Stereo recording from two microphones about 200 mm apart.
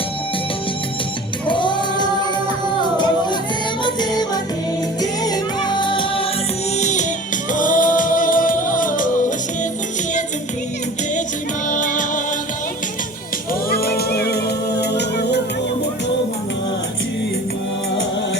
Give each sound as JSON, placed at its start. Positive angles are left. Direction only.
{"t": 1.5, "sound": "music", "side_deg": 25}
{"t": 6.7, "sound": "music", "side_deg": 35}
{"t": 11.7, "sound": "music", "side_deg": 40}
{"t": 13.7, "sound": "music", "side_deg": 50}